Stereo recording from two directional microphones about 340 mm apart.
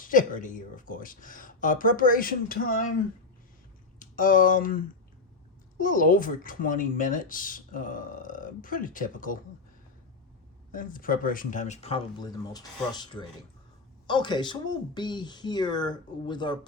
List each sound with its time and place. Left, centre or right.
0.0 s speech: left
4.0 s speech: left
5.8 s speech: left
10.7 s speech: left